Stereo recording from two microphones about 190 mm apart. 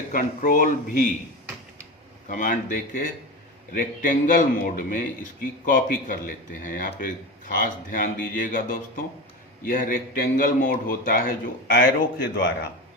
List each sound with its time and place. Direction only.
0.1 s a man's voice: 45° left (ahead or behind)
2.3 s a man's voice: 40° left (ahead or behind); by 12.5 s 55° left (ahead or behind)